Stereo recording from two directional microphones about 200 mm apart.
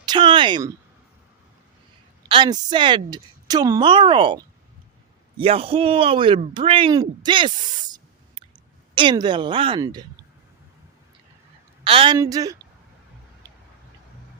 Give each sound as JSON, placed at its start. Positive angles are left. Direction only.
{"t": 0.0, "sound": "a sound", "side_deg": -20}
{"t": 2.3, "sound": "speech", "side_deg": -20}
{"t": 5.4, "sound": "speech", "side_deg": -30}
{"t": 11.9, "sound": "speech", "side_deg": -25}